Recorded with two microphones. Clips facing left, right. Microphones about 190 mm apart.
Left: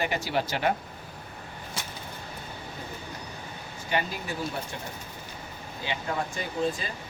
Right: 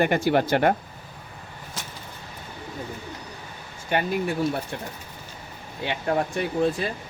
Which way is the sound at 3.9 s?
55° right (ahead or behind).